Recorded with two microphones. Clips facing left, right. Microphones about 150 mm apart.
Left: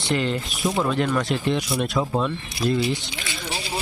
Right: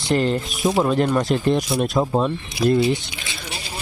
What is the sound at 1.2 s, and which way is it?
Speech, 40° right (ahead or behind).